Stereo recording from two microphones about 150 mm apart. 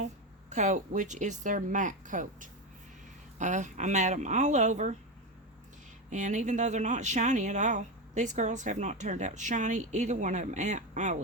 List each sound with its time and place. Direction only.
0.5 s speech: 55° right (ahead or behind)
6.1 s speech: 55° right (ahead or behind)